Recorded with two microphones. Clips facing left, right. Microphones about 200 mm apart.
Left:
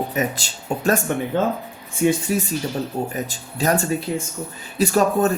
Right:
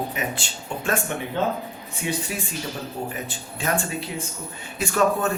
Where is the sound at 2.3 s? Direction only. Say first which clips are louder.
Left 8 dB; 40° left (ahead or behind).